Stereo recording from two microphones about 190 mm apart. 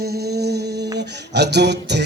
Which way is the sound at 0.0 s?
55° right (ahead or behind).